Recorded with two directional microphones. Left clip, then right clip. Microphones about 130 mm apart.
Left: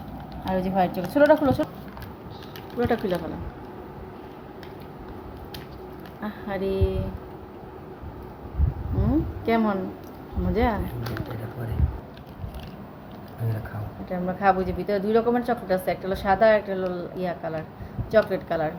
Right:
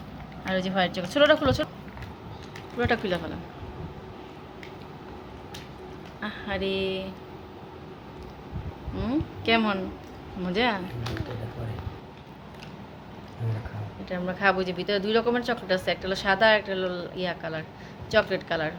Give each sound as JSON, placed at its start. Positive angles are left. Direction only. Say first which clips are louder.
{"t": 0.5, "sound": "a woman's voice", "louder": "left 2 dB", "side_deg": 5}
{"t": 2.7, "sound": "a woman's voice", "louder": "left 1 dB", "side_deg": 10}
{"t": 6.2, "sound": "a woman's voice", "louder": "left 1 dB", "side_deg": 10}
{"t": 9.0, "sound": "a woman's voice", "louder": "left 3 dB", "side_deg": 15}
{"t": 14.1, "sound": "a woman's voice", "louder": "left 2 dB", "side_deg": 10}